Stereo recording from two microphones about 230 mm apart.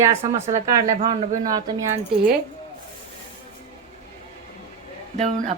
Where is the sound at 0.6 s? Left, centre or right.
Centre.